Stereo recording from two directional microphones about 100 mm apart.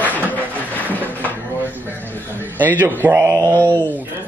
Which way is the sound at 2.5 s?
15° left (ahead or behind).